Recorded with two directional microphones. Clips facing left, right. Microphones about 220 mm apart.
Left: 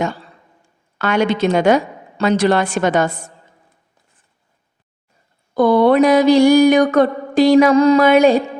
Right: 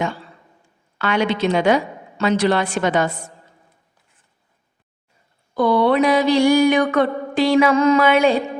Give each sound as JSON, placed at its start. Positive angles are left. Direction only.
{"t": 0.9, "sound": "a woman's voice", "side_deg": 45}
{"t": 5.5, "sound": "mantra", "side_deg": 45}